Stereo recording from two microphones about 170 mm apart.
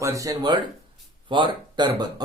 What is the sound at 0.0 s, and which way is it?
Speech, 20° right (ahead or behind).